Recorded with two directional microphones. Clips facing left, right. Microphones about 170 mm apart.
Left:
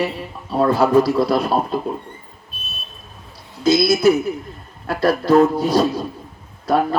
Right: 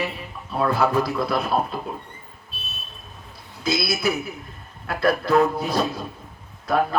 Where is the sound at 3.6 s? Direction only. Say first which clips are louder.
Left 10 dB; 40° left (ahead or behind).